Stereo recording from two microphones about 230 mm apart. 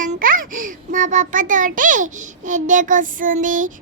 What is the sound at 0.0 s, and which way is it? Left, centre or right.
A child's voice, right.